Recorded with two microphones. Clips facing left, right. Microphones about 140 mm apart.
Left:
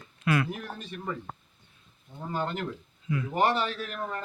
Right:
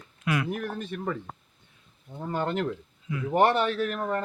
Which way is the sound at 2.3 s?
55° right (ahead or behind).